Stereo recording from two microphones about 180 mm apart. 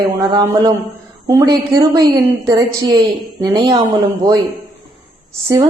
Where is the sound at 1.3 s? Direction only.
20° right (ahead or behind).